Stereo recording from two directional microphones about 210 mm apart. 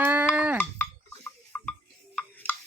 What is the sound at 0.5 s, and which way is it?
Cowbell, 10° left (ahead or behind).